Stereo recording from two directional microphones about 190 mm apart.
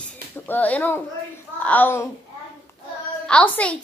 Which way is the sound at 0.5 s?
10° left (ahead or behind).